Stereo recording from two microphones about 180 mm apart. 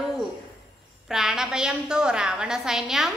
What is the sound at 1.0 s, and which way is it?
A woman's voice, centre (ahead or behind).